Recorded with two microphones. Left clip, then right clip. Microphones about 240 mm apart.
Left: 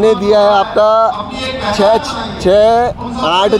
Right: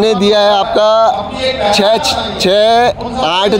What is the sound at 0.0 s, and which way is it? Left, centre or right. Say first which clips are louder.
A man's voice: even; right.